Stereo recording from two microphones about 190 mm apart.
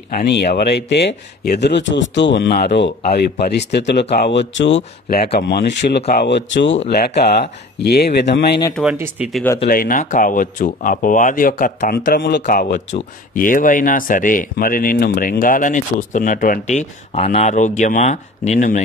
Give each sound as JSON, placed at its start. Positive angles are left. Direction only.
{"t": 0.1, "sound": "speech", "side_deg": 60}
{"t": 5.2, "sound": "speech", "side_deg": 55}
{"t": 6.9, "sound": "speech", "side_deg": 60}
{"t": 8.9, "sound": "speech", "side_deg": -10}
{"t": 9.7, "sound": "speech", "side_deg": 45}
{"t": 12.0, "sound": "speech", "side_deg": 65}
{"t": 12.4, "sound": "speech", "side_deg": 50}